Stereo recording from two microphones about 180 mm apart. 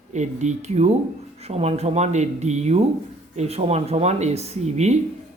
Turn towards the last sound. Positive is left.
turn(degrees=-40)  # may be behind; listen again after turning